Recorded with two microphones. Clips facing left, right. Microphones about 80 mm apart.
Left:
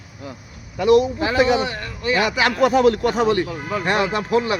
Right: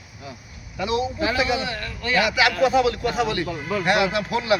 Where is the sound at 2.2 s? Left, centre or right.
Left.